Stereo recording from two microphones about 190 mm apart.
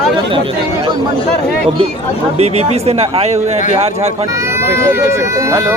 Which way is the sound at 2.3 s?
35° right (ahead or behind).